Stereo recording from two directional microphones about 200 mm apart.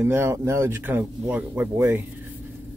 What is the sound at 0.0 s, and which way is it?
Speech, 10° right (ahead or behind).